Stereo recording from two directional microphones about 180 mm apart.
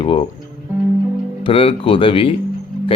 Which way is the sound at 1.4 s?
30° left (ahead or behind).